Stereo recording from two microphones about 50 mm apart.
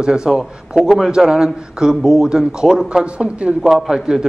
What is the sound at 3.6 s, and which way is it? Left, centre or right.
Speech, centre.